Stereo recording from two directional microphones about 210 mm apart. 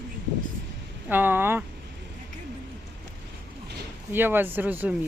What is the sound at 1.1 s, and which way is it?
Speech, 10° right (ahead or behind).